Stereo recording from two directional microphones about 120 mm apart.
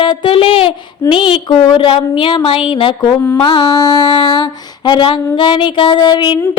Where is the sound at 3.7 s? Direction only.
30° left (ahead or behind).